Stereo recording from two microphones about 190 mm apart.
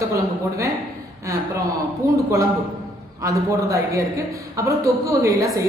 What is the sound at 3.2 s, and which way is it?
A woman's voice, 15° right (ahead or behind).